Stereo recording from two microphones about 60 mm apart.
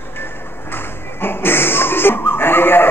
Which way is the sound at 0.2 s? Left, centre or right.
Left.